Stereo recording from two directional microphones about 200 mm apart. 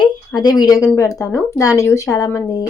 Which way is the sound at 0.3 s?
20° left (ahead or behind).